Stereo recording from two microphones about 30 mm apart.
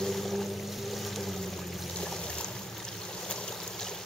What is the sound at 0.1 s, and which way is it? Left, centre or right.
Vehicle, centre.